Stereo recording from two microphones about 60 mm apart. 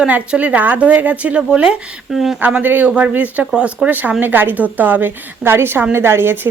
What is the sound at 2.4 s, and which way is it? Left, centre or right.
Speech, right.